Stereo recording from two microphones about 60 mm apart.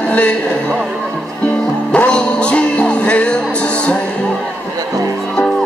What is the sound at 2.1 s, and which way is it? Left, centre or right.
Music, centre.